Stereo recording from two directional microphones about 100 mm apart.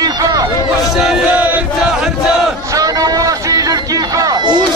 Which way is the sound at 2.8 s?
35° right (ahead or behind).